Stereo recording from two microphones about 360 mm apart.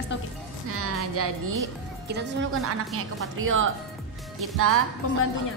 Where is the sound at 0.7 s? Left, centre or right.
Right.